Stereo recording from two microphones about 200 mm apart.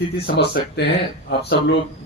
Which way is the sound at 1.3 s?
55° left (ahead or behind).